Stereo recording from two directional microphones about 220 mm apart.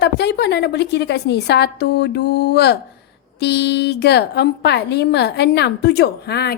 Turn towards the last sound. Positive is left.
turn(degrees=45)  # may be behind; listen again after turning